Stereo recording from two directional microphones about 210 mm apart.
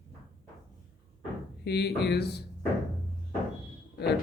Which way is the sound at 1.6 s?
50° left (ahead or behind).